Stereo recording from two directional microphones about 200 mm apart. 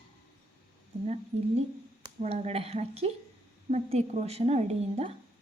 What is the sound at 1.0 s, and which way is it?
Speech, 30° right (ahead or behind).